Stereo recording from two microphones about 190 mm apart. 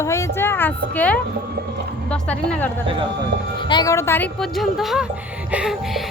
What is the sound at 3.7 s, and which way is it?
Speech, 20° left (ahead or behind).